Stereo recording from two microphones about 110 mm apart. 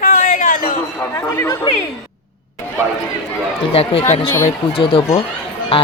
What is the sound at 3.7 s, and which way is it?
Speech, 60° left (ahead or behind).